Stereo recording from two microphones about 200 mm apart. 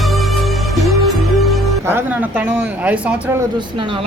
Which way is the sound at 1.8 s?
10° right (ahead or behind).